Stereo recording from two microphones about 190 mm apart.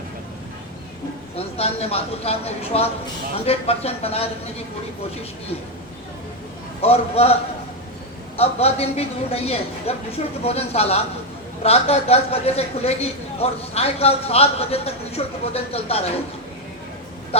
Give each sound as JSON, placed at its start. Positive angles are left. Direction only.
{"t": 1.4, "sound": "a man's voice", "side_deg": 30}
{"t": 6.8, "sound": "a man's voice", "side_deg": 30}
{"t": 8.4, "sound": "a man's voice", "side_deg": 30}